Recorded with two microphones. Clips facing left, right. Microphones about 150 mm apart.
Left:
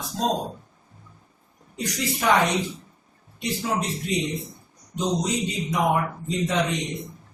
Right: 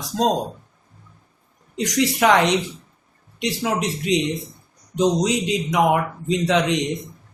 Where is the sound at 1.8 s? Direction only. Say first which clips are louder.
Right 8 dB; 90° right.